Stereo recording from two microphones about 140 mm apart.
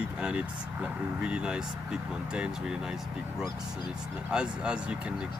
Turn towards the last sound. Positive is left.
turn(degrees=-5)  # may be behind; listen again after turning